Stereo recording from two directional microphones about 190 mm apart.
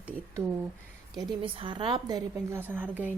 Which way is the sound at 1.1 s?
25° right (ahead or behind).